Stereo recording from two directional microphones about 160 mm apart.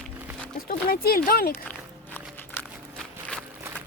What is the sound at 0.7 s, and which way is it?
Speech, 70° left (ahead or behind).